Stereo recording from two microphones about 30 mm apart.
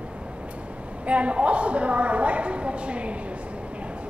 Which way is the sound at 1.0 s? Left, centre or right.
Right.